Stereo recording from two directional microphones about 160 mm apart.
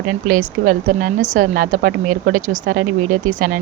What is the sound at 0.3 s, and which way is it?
A woman's voice, 60° right (ahead or behind).